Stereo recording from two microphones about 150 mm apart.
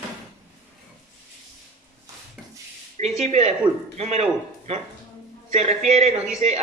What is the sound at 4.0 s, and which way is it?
Music, 45° right (ahead or behind).